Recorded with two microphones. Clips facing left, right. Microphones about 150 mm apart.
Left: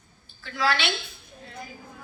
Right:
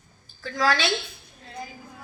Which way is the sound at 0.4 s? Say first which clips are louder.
Right 2 dB; 40° right (ahead or behind).